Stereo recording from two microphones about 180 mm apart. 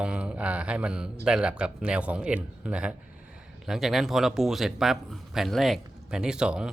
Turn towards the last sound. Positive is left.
turn(degrees=-5)  # may be behind; listen again after turning